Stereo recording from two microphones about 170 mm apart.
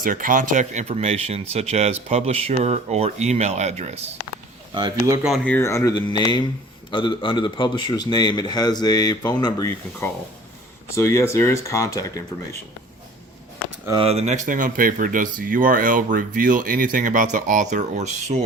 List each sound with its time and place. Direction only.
0.0 s speech: 50° right (ahead or behind)
4.7 s speech: 25° right (ahead or behind)
5.2 s speech: centre (ahead or behind)
5.5 s speech: 15° left (ahead or behind)
6.9 s a man's voice: 30° left (ahead or behind)
13.9 s speech: 35° right (ahead or behind)